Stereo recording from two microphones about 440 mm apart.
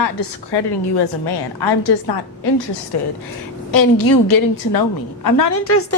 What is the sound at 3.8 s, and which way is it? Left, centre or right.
A woman's voice, left.